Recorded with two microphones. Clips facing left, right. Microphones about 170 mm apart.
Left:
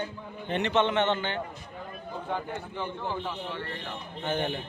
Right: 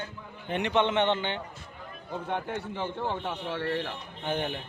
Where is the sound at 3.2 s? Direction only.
75° right (ahead or behind).